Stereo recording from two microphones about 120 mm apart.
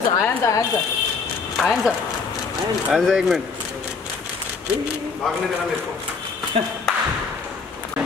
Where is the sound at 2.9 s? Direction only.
Centre (ahead or behind).